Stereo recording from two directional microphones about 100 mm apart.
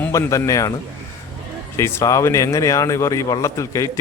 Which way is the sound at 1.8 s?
30° left (ahead or behind).